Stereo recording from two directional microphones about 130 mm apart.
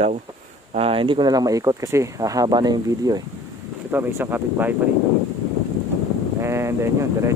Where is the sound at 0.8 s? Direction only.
45° right (ahead or behind).